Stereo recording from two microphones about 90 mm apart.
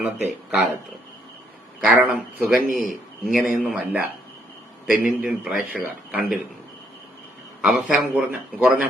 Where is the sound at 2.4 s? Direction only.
Centre (ahead or behind).